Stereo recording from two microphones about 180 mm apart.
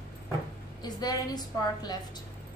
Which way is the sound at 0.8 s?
20° left (ahead or behind).